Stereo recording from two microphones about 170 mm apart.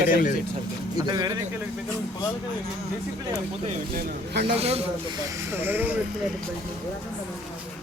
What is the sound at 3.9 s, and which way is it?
Speech, 75° right (ahead or behind).